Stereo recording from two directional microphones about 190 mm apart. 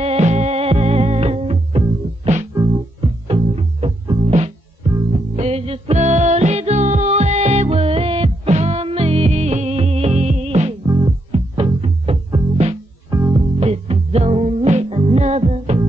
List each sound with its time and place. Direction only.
0.0 s music: 35° right (ahead or behind)
10.9 s music: 20° right (ahead or behind)
11.3 s music: 30° right (ahead or behind)
13.1 s music: 15° right (ahead or behind)
13.6 s music: 30° right (ahead or behind)